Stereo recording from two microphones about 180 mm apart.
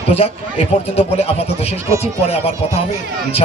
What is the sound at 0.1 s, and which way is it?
A man's voice, 35° left (ahead or behind).